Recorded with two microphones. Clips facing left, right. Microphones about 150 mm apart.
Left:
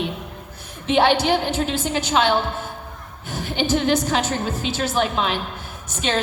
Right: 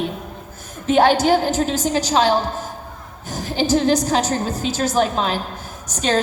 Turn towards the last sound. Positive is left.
turn(degrees=-40)  # may be behind; listen again after turning